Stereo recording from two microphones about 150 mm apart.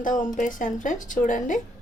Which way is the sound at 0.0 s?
60° left (ahead or behind).